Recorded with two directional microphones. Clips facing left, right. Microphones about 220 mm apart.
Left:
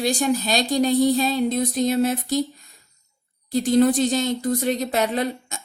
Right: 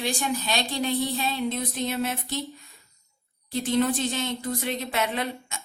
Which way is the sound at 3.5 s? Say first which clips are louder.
Left 7 dB; 40° left (ahead or behind).